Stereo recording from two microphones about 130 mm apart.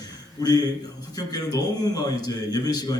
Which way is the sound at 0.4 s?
30° left (ahead or behind).